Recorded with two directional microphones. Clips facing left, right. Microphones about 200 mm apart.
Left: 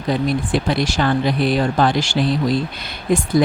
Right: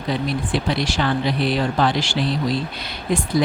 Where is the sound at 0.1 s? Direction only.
50° left (ahead or behind).